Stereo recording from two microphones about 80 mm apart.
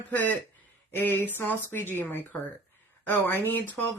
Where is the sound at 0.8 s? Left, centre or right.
Left.